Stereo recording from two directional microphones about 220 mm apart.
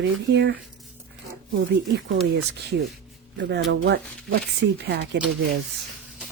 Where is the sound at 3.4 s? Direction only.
50° right (ahead or behind).